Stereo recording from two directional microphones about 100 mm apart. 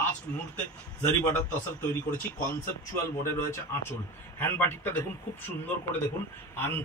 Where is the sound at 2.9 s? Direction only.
25° left (ahead or behind).